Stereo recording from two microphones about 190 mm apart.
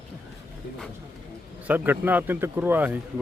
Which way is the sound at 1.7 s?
10° right (ahead or behind).